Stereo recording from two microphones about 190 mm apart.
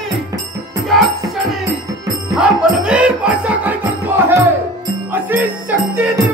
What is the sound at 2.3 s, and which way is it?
Music, 5° right (ahead or behind).